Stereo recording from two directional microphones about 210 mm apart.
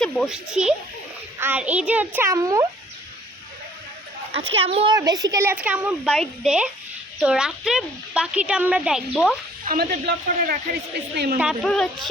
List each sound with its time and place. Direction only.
0.0 s speech: centre (ahead or behind); by 2.6 s 15° right (ahead or behind)
4.3 s a woman's voice: 25° right (ahead or behind); by 9.3 s centre (ahead or behind)
9.6 s speech: 45° right (ahead or behind)
11.3 s speech: centre (ahead or behind)